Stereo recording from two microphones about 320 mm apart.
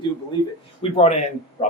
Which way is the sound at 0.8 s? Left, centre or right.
Centre.